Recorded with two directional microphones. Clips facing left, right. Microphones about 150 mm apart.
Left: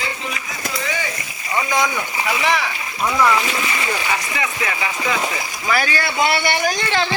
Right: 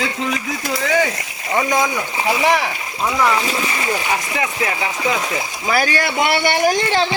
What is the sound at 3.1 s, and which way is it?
Speech, 15° right (ahead or behind).